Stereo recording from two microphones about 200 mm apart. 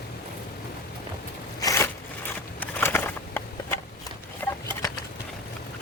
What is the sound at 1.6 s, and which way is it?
Zipper, 15° left (ahead or behind).